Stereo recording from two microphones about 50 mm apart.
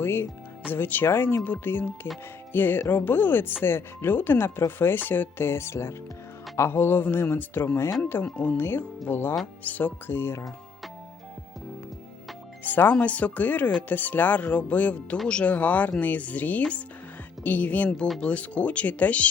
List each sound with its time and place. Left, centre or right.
0.0 s speech: left
0.7 s speech: left
6.7 s speech: left
8.2 s speech: left
9.0 s speech: left
9.6 s speech: left
10.1 s speech: left
12.6 s speech: left
15.5 s speech: left